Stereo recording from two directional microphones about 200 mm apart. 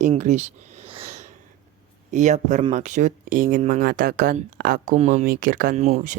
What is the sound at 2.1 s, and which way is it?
Speech, 35° right (ahead or behind).